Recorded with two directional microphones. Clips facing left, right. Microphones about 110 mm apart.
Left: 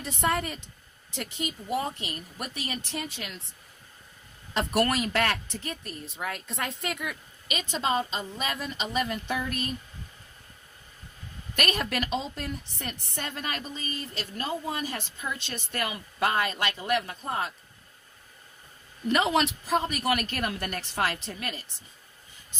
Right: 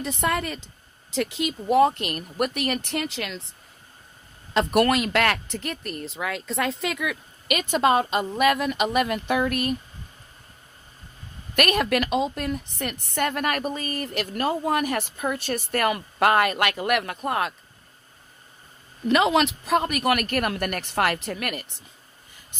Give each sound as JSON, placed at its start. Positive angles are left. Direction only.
{"t": 0.0, "sound": "speech", "side_deg": -85}
{"t": 4.6, "sound": "speech", "side_deg": -90}
{"t": 11.5, "sound": "speech", "side_deg": -70}
{"t": 13.1, "sound": "a woman's voice", "side_deg": -60}
{"t": 15.9, "sound": "speech", "side_deg": -65}
{"t": 19.0, "sound": "a woman's voice", "side_deg": -90}